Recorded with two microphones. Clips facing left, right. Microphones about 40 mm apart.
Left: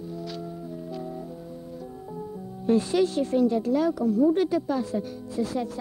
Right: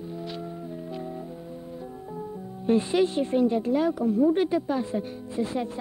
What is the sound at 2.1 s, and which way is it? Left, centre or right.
Speech, right.